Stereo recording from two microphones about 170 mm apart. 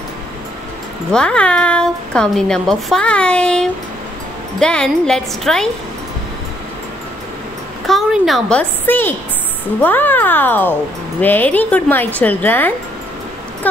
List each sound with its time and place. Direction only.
1.1 s speech: 5° left (ahead or behind)
7.8 s speech: centre (ahead or behind)